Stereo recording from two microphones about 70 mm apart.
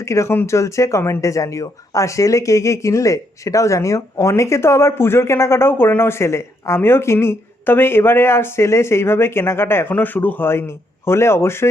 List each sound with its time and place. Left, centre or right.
0.0 s speech: left